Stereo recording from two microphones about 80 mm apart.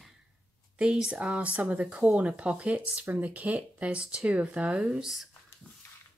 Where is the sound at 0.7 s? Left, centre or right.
Centre.